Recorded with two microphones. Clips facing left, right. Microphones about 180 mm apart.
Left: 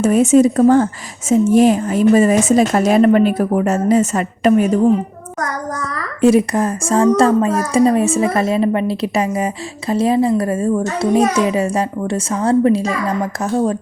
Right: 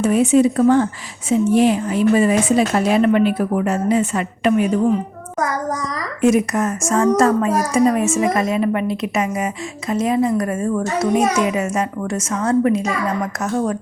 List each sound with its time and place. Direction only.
0.0 s a woman's voice: 45° left (ahead or behind)
5.4 s a child's voice: 10° right (ahead or behind)
6.2 s a woman's voice: 30° left (ahead or behind)